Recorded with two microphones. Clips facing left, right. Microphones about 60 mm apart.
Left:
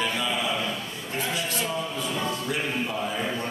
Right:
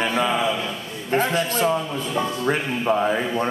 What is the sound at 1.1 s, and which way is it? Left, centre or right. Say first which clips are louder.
Speech: right 9 dB; right.